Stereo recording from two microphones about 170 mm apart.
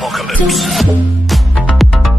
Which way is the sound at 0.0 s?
Centre (ahead or behind).